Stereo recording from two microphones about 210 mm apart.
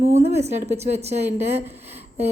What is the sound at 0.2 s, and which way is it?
A woman's voice, 30° right (ahead or behind).